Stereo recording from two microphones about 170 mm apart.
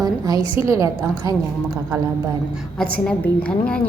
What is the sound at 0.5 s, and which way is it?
Speech, 15° right (ahead or behind).